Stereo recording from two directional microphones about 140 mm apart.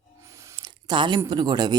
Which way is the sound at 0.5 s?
30° right (ahead or behind).